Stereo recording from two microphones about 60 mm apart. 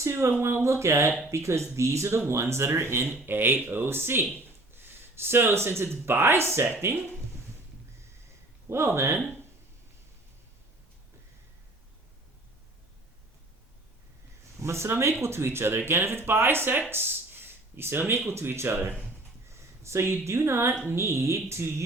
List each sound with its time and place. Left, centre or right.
0.0 s speech: right
8.7 s speech: right
14.6 s speech: right